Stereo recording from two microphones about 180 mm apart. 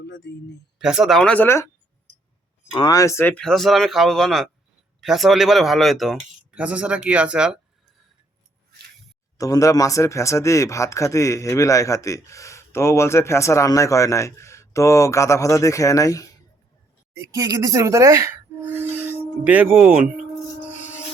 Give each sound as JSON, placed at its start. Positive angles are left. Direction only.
{"t": 0.0, "sound": "speech", "side_deg": 70}
{"t": 0.8, "sound": "speech", "side_deg": -5}
{"t": 9.4, "sound": "speech", "side_deg": 20}
{"t": 17.2, "sound": "speech", "side_deg": -20}